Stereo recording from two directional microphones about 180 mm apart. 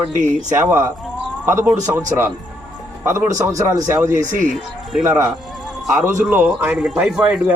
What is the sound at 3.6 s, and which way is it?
A man's voice, 15° right (ahead or behind).